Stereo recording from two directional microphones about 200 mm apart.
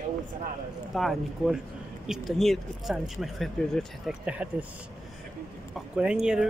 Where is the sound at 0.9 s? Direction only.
Centre (ahead or behind).